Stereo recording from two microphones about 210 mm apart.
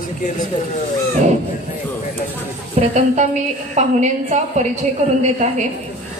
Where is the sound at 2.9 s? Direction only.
35° right (ahead or behind).